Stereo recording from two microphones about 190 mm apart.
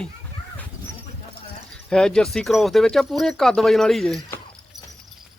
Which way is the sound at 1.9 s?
5° left (ahead or behind).